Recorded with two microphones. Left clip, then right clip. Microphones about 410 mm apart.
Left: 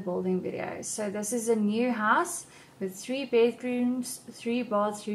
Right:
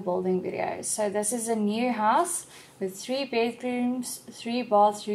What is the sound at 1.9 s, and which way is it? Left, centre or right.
Speech, right.